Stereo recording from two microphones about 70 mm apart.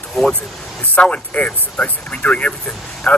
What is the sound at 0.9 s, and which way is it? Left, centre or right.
Speech, centre.